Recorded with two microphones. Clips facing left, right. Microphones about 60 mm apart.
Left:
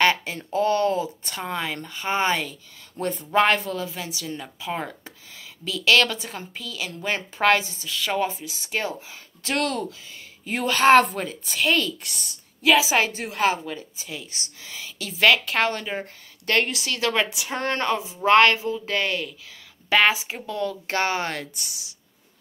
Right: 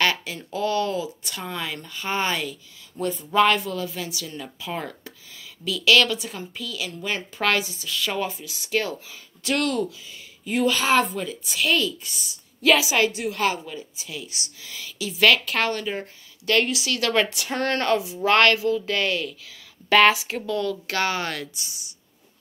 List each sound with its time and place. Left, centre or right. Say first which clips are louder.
0.0 s speech: left 3 dB; left
3.0 s speech: right 1 dB; left
3.3 s a woman's voice: right 1 dB; left
10.9 s a woman's voice: left 5 dB; left
11.2 s speech: left 1 dB; left
12.0 s a woman's voice: left 1 dB; left
12.8 s a woman's voice: right 1 dB; left
17.1 s a woman's voice: right 2 dB; centre
21.5 s a woman's voice: left 1 dB; left